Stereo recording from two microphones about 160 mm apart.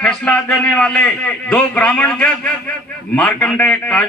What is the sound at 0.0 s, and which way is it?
A man's voice, 5° left (ahead or behind).